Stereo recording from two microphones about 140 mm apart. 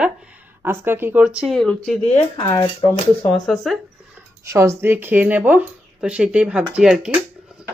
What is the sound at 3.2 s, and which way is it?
Speech, 5° left (ahead or behind).